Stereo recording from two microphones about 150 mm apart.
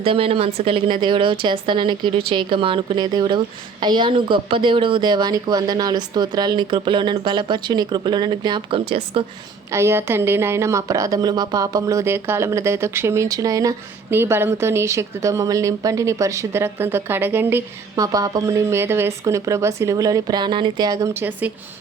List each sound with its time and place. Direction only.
0.0 s speech: 40° right (ahead or behind)
8.9 s speech: 40° right (ahead or behind)
9.7 s a woman's voice: 15° right (ahead or behind)